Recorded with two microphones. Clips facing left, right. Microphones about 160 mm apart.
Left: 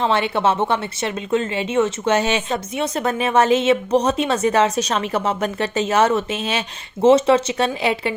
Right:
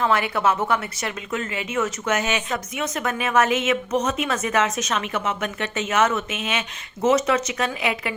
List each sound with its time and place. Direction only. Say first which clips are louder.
0.0 s a woman's voice: left 2 dB; 25° left (ahead or behind)